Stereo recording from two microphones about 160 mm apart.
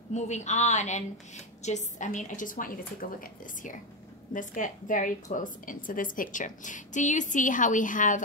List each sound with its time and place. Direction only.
0.1 s a woman's voice: 45° left (ahead or behind); by 3.2 s 65° left (ahead or behind)
4.3 s a woman's voice: 55° left (ahead or behind)